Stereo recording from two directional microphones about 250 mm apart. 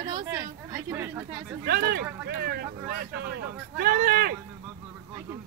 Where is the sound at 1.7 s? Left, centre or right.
Right.